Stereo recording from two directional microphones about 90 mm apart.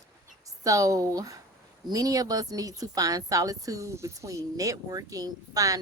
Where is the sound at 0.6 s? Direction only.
40° right (ahead or behind).